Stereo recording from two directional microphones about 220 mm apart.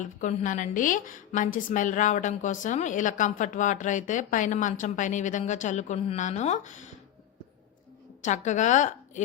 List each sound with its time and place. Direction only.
0.0 s a woman's voice: 35° left (ahead or behind)
8.2 s a woman's voice: 35° left (ahead or behind)